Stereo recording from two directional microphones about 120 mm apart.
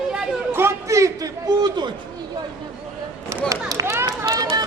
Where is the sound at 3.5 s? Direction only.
30° right (ahead or behind).